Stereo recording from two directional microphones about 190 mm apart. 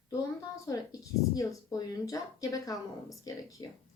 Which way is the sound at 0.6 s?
15° left (ahead or behind).